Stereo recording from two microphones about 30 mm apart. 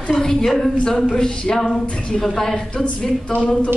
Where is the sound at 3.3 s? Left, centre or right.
Centre.